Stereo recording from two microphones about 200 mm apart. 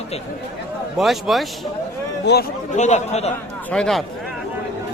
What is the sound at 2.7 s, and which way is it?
Speech, 35° left (ahead or behind).